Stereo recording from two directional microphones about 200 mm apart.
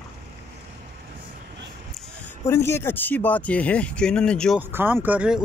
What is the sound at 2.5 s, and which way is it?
Speech, 10° left (ahead or behind).